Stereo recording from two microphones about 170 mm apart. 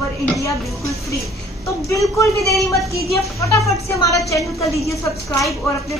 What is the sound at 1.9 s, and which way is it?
A woman's voice, 20° left (ahead or behind).